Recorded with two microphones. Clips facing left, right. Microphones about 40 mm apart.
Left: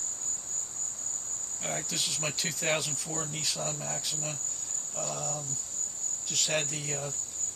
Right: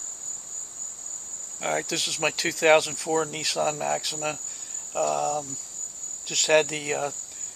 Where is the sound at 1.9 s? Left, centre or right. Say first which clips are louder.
Right 7 dB; right.